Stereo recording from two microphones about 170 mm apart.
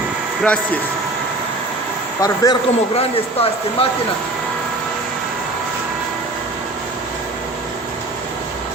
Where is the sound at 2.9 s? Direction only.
35° left (ahead or behind).